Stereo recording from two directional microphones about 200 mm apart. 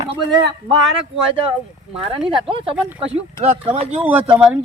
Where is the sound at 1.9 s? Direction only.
30° right (ahead or behind).